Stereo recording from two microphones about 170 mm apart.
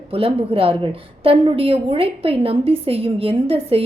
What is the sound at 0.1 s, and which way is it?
A woman's voice, 35° right (ahead or behind).